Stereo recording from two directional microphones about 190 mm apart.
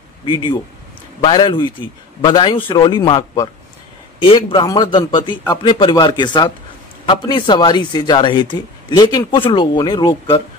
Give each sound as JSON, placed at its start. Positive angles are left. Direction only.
{"t": 0.2, "sound": "speech", "side_deg": 25}